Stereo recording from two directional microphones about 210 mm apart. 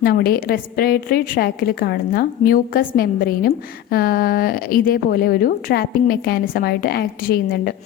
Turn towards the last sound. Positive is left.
turn(degrees=50)  # may be behind; listen again after turning